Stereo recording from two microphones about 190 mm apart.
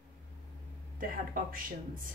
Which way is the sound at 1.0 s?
50° right (ahead or behind).